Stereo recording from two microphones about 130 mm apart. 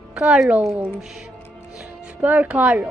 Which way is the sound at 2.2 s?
10° right (ahead or behind).